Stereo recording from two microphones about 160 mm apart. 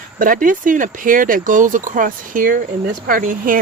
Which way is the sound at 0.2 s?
55° right (ahead or behind).